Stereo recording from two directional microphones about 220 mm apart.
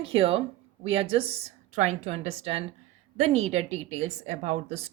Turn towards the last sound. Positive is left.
turn(degrees=-30)  # may be behind; listen again after turning